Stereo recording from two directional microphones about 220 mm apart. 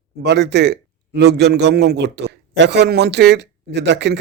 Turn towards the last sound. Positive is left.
turn(degrees=-50)  # may be behind; listen again after turning